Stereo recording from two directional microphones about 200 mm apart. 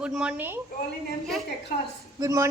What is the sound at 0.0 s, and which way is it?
Speech, 5° right (ahead or behind).